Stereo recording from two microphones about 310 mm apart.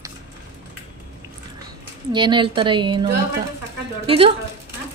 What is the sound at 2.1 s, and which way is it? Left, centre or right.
A woman's voice, centre.